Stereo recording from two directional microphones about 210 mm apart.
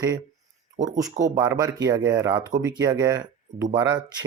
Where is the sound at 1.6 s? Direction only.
15° right (ahead or behind).